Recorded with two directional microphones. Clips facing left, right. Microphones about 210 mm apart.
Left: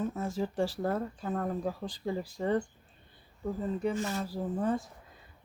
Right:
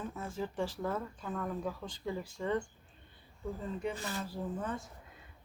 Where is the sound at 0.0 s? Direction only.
40° left (ahead or behind).